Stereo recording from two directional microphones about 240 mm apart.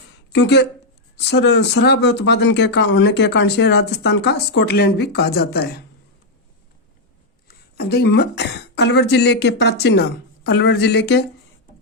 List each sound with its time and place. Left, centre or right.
0.3 s speech: left
7.4 s speech: left